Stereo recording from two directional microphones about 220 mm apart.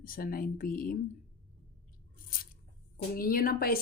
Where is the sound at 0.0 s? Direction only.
40° left (ahead or behind).